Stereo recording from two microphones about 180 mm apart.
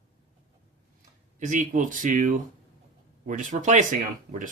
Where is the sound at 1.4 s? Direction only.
45° right (ahead or behind).